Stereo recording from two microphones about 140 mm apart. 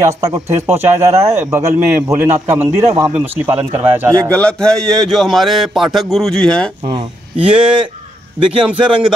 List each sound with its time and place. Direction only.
0.0 s a man's voice: 20° right (ahead or behind)
4.3 s speech: 5° left (ahead or behind)
6.9 s speech: 40° right (ahead or behind)
8.6 s a man's voice: 5° right (ahead or behind)